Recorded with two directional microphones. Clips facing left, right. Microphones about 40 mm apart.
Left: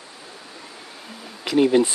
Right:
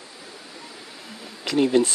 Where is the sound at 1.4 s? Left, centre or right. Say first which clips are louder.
Left 2 dB; centre.